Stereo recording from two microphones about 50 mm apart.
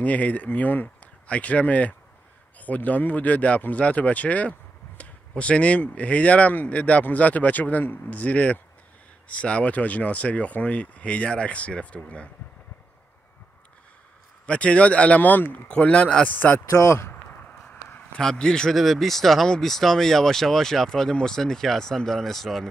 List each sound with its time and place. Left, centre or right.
0.0 s speech: left
14.4 s speech: left
16.3 s speech: left
16.7 s speech: left
18.2 s speech: centre
18.7 s speech: centre